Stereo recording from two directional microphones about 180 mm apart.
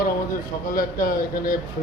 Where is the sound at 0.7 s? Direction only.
50° left (ahead or behind).